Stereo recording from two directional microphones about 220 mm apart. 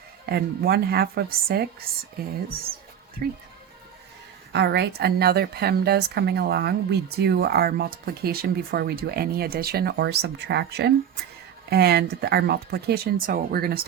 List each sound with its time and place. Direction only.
0.3 s a woman's voice: 45° right (ahead or behind)
4.5 s a woman's voice: 50° right (ahead or behind)